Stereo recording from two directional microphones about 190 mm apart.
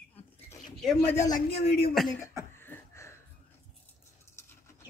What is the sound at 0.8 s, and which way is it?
Speech, 10° left (ahead or behind).